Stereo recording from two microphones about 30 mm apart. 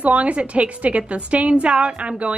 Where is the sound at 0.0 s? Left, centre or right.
Right.